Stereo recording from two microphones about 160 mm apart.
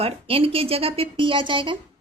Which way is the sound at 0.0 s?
35° right (ahead or behind).